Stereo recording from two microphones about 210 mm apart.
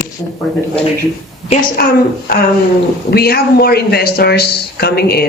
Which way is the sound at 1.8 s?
45° left (ahead or behind).